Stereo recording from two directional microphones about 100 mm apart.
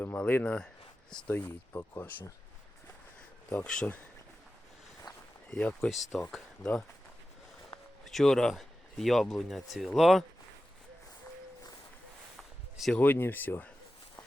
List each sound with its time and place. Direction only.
0.0 s speech: 20° left (ahead or behind)
1.4 s speech: 20° left (ahead or behind)
3.5 s speech: 10° left (ahead or behind)
5.1 s a sound: 45° left (ahead or behind)
5.5 s speech: 10° left (ahead or behind)
8.0 s speech: 5° left (ahead or behind)
12.4 s a sound: centre (ahead or behind)
13.0 s speech: 20° left (ahead or behind)